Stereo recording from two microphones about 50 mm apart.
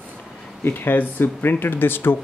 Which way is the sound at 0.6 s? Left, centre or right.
Left.